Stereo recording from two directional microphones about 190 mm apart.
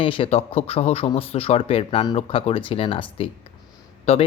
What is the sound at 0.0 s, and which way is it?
Speech, 30° left (ahead or behind).